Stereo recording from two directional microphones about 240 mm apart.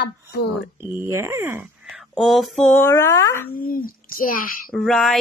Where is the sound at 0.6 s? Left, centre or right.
Centre.